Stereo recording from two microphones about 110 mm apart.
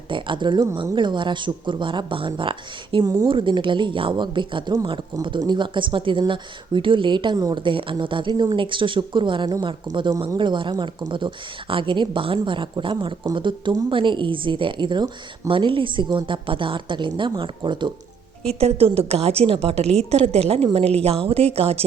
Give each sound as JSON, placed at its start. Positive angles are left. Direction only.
{"t": 0.1, "sound": "speech", "side_deg": -50}
{"t": 7.6, "sound": "speech", "side_deg": -50}
{"t": 18.6, "sound": "a woman's voice", "side_deg": -65}